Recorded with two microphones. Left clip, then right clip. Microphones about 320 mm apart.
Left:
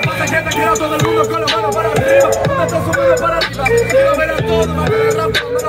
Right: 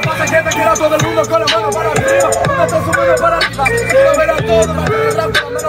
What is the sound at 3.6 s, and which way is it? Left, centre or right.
Speech, centre.